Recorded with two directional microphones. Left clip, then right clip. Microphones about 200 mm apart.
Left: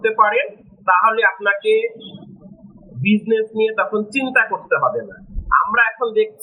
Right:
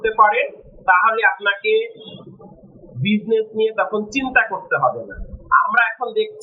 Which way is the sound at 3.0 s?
5° left (ahead or behind).